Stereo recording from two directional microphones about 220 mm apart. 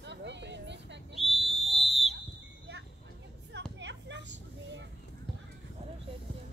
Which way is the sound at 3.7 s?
55° right (ahead or behind).